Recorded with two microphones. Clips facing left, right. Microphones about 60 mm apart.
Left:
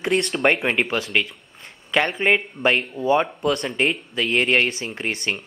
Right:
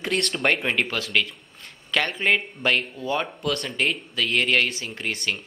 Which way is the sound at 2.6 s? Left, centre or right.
Left.